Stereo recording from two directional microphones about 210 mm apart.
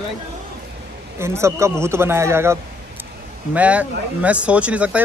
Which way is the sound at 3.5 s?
5° right (ahead or behind).